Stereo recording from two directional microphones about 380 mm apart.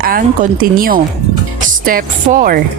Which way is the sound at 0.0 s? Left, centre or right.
Right.